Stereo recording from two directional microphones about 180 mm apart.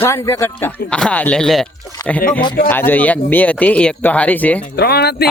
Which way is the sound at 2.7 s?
10° left (ahead or behind).